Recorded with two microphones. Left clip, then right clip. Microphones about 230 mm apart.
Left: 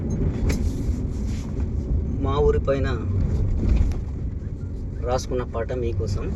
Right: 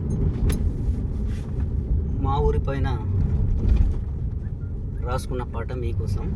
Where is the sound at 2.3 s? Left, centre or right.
Centre.